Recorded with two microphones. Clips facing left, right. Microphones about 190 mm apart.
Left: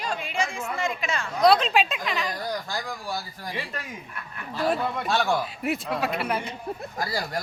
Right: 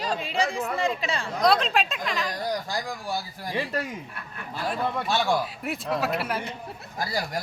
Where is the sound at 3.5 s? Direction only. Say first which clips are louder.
Right 7 dB; 35° right (ahead or behind).